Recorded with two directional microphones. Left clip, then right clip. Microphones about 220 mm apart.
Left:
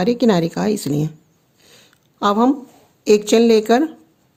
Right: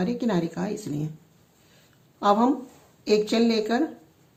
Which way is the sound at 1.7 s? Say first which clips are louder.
Left 11 dB; 50° left (ahead or behind).